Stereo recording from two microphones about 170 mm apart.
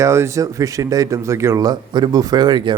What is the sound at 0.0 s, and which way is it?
Speech, 15° right (ahead or behind).